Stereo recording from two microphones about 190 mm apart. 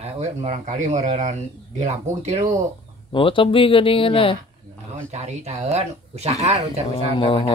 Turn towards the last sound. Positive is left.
turn(degrees=30)  # may be behind; listen again after turning